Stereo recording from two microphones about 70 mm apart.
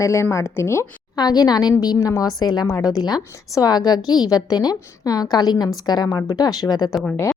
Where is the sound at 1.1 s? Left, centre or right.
Left.